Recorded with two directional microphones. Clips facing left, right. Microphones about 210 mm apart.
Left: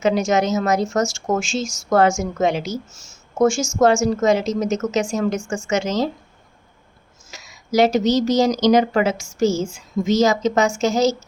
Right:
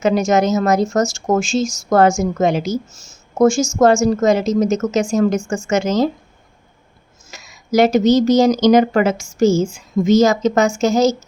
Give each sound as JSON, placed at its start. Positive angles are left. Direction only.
{"t": 0.0, "sound": "speech", "side_deg": -45}
{"t": 7.3, "sound": "speech", "side_deg": -55}